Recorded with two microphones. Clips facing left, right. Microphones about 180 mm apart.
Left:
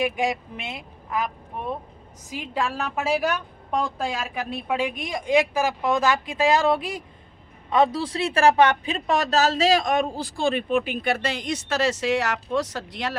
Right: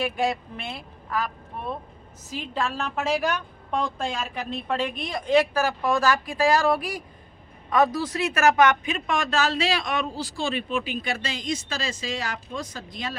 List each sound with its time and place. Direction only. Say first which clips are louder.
0.0 s a woman's voice: left 1 dB; 15° left (ahead or behind)
2.3 s a woman's voice: left 1 dB; 15° left (ahead or behind); by 13.1 s 75° left (ahead or behind)